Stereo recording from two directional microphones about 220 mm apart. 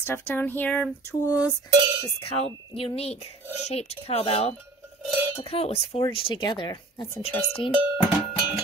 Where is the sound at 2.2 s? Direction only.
25° left (ahead or behind).